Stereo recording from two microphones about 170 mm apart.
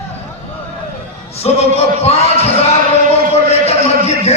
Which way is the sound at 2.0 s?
35° left (ahead or behind).